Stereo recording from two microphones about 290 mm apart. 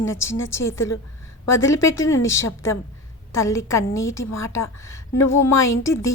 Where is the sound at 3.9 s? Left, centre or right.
Left.